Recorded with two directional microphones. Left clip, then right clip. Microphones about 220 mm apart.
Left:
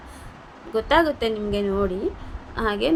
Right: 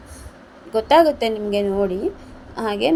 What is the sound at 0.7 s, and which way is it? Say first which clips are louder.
A woman's voice: right 5 dB; 10° right (ahead or behind).